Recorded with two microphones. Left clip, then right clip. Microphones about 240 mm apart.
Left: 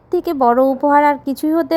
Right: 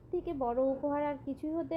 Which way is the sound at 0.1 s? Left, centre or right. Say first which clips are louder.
Left 19 dB; left.